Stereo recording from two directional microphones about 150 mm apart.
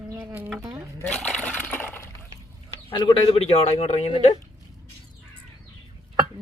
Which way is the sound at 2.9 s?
30° left (ahead or behind).